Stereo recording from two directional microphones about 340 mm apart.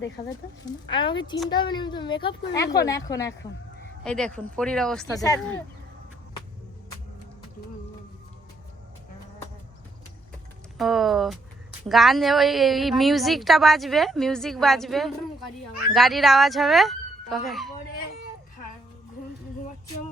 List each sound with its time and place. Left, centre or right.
0.2 s a woman's voice: centre
10.8 s a woman's voice: centre